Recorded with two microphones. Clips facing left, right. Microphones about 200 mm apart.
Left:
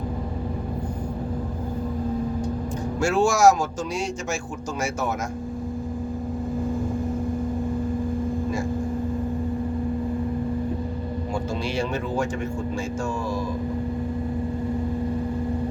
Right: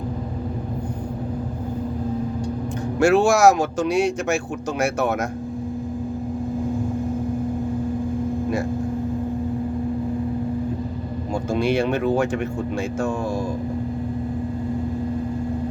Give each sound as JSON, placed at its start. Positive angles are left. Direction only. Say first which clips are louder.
{"t": 3.0, "sound": "speech", "louder": "right 3 dB", "side_deg": -65}
{"t": 11.5, "sound": "speech", "louder": "right 9 dB", "side_deg": -60}